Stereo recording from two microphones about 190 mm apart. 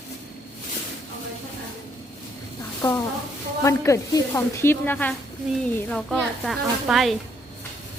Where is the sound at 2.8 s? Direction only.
25° left (ahead or behind); by 7.2 s centre (ahead or behind).